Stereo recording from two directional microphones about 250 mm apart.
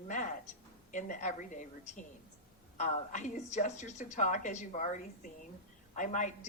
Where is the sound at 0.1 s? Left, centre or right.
Left.